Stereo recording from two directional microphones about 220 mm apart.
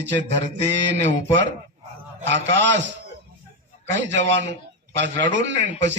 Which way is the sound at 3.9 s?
55° right (ahead or behind).